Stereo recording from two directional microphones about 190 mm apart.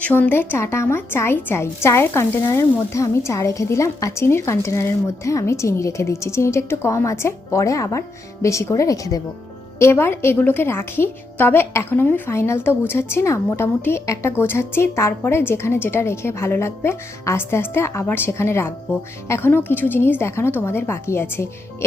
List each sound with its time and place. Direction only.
0.0 s a woman's voice: 10° left (ahead or behind)